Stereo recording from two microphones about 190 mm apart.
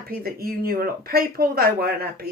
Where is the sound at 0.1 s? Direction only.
50° right (ahead or behind).